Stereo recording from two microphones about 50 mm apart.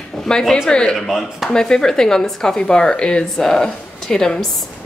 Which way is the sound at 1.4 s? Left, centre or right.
Centre.